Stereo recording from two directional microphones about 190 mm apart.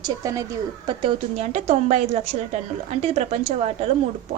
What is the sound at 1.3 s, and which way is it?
Speech, 35° right (ahead or behind).